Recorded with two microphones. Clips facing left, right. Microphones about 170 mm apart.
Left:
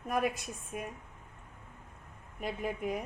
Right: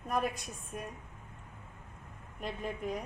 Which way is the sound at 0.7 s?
5° left (ahead or behind).